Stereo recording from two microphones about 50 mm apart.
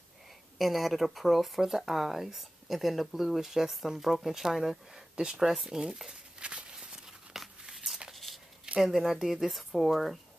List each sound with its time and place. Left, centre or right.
0.6 s speech: centre
6.4 s a sound: centre
8.7 s speech: centre